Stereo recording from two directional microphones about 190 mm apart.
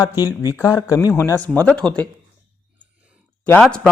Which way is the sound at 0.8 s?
20° left (ahead or behind).